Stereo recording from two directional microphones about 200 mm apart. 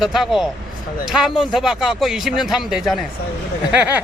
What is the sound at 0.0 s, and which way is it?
A man's voice, centre (ahead or behind).